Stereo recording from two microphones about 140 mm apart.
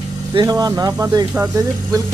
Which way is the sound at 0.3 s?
25° right (ahead or behind).